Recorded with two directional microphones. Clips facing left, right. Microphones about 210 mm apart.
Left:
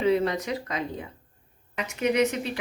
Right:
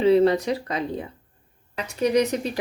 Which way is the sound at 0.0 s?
30° right (ahead or behind).